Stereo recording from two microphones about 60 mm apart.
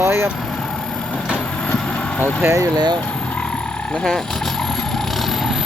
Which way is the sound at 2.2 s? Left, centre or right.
Right.